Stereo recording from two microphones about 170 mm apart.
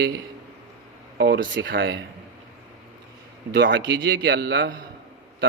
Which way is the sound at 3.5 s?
90° right.